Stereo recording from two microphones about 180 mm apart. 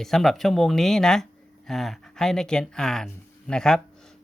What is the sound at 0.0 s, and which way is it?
Speech, centre (ahead or behind).